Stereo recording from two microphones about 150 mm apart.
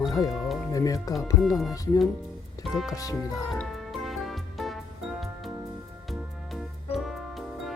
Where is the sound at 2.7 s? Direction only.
Centre (ahead or behind).